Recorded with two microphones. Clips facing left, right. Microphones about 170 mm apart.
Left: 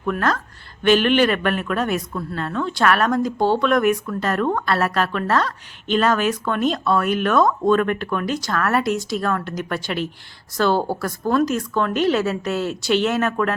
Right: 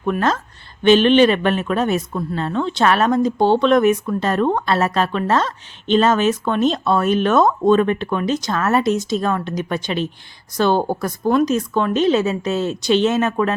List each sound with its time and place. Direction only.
0.0 s a woman's voice: 20° right (ahead or behind)